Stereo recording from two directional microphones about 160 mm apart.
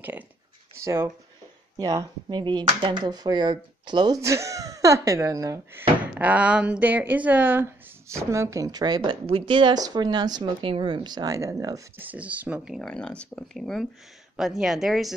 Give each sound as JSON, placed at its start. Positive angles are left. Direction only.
{"t": 0.8, "sound": "speech", "side_deg": -15}
{"t": 12.1, "sound": "speech", "side_deg": -10}